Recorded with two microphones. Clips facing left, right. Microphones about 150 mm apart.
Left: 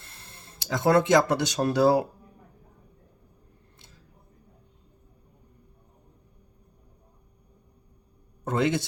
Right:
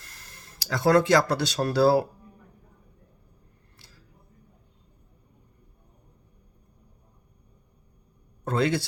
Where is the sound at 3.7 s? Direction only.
20° left (ahead or behind).